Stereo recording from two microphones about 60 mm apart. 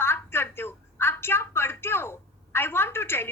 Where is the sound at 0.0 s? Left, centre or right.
Left.